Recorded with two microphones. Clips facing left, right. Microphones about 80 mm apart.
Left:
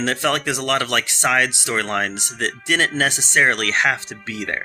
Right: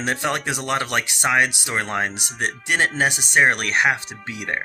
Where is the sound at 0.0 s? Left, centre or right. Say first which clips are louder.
Left 3 dB; centre.